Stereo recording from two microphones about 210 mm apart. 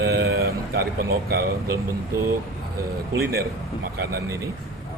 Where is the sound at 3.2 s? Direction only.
50° right (ahead or behind).